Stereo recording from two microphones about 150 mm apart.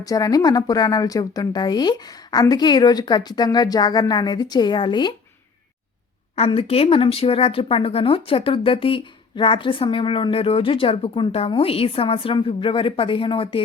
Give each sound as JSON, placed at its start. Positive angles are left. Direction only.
{"t": 0.0, "sound": "speech", "side_deg": 25}
{"t": 6.3, "sound": "speech", "side_deg": 40}